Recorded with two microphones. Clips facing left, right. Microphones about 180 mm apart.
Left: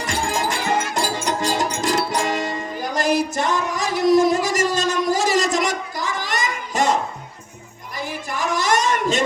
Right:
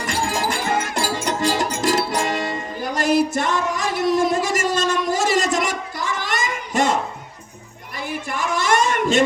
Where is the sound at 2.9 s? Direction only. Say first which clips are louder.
Right 2 dB; 40° left (ahead or behind).